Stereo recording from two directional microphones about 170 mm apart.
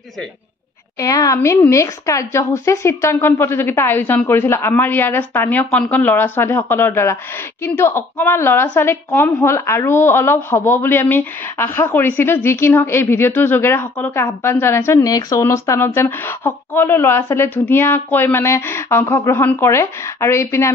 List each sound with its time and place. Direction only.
0.9 s a woman's voice: 20° left (ahead or behind)